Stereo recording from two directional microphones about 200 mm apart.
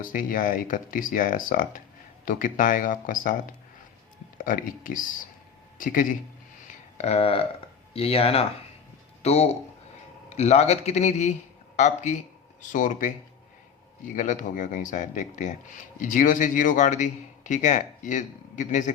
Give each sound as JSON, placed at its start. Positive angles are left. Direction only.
{"t": 0.0, "sound": "a man's voice", "side_deg": 45}
{"t": 6.7, "sound": "a sound", "side_deg": 35}
{"t": 7.9, "sound": "a man's voice", "side_deg": 30}
{"t": 14.2, "sound": "a man's voice", "side_deg": 40}